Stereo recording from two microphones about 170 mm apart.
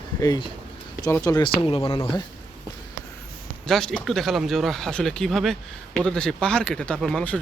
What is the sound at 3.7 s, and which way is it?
Speech, 5° left (ahead or behind).